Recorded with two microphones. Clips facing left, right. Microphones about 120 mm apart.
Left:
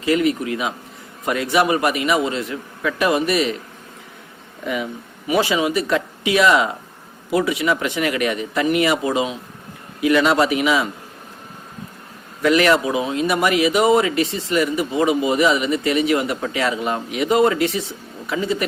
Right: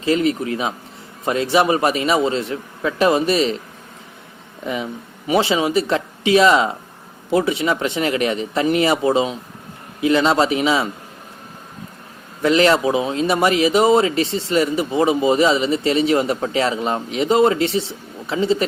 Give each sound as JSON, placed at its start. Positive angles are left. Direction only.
{"t": 0.0, "sound": "speech", "side_deg": -30}
{"t": 4.6, "sound": "speech", "side_deg": -25}
{"t": 12.4, "sound": "speech", "side_deg": -25}